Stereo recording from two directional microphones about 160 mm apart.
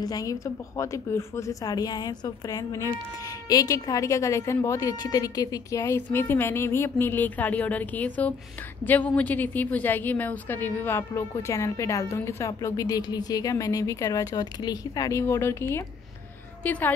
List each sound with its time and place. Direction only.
0.0 s a woman's voice: 25° left (ahead or behind)